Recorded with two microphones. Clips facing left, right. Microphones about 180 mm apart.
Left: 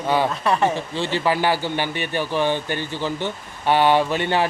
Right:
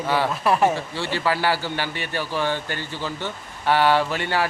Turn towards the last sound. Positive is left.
turn(degrees=20)  # may be behind; listen again after turning